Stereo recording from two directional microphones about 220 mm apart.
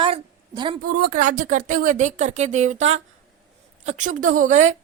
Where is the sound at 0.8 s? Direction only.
45° right (ahead or behind).